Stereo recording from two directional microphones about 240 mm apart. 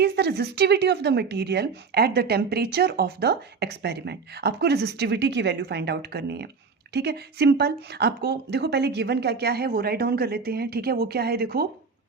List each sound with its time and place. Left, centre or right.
0.0 s speech: right